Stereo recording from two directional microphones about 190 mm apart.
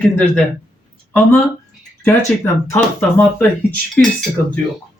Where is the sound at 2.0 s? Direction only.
15° left (ahead or behind).